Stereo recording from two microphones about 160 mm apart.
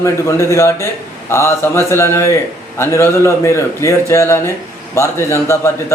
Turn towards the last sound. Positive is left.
turn(degrees=15)  # may be behind; listen again after turning